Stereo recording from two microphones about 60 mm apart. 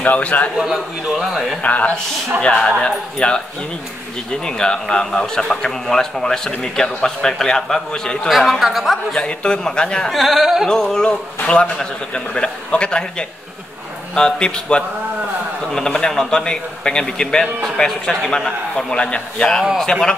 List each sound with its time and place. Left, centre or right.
0.0 s a man's voice: left
0.6 s a man's voice: centre
1.6 s a man's voice: left
8.3 s speech: centre
9.1 s speech: centre
10.0 s speech: centre
10.7 s speech: centre
14.1 s speech: centre